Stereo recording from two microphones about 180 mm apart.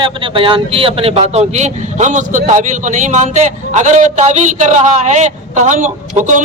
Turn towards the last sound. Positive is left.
turn(degrees=-45)  # may be behind; listen again after turning